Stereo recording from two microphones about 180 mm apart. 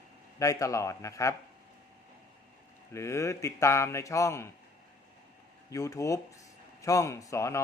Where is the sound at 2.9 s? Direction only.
15° left (ahead or behind).